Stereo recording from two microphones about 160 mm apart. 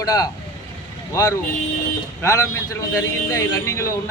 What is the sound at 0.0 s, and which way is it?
Speech, 20° left (ahead or behind).